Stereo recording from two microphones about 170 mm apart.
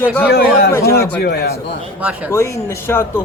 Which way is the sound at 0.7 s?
15° left (ahead or behind).